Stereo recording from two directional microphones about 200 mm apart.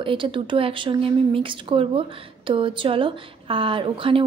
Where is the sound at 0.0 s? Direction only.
25° right (ahead or behind).